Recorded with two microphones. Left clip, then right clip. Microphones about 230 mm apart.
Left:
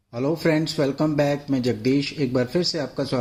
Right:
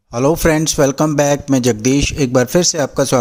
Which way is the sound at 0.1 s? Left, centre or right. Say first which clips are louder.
Right 8 dB; right.